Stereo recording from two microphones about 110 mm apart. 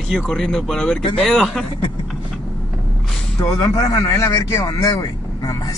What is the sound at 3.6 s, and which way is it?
Speech, 40° left (ahead or behind).